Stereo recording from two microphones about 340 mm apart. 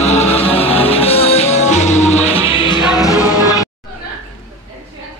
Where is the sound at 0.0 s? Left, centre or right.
Centre.